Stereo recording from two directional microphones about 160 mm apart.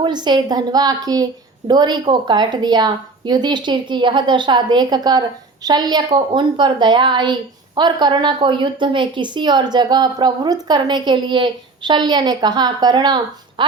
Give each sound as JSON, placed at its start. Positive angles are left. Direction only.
{"t": 0.0, "sound": "a woman's voice", "side_deg": -30}